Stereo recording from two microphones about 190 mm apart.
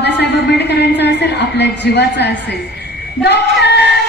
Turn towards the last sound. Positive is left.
turn(degrees=60)  # may be behind; listen again after turning